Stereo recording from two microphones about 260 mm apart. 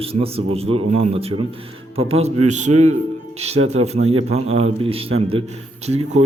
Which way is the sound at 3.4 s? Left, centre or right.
Right.